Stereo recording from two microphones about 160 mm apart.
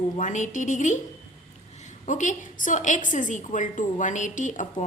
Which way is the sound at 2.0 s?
50° left (ahead or behind).